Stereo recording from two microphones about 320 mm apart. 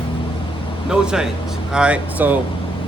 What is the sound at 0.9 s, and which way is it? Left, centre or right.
A man's voice, centre.